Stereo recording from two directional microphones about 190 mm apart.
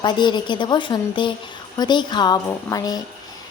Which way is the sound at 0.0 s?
25° left (ahead or behind).